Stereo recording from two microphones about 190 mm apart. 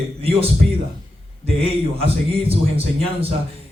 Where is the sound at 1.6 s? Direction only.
30° right (ahead or behind).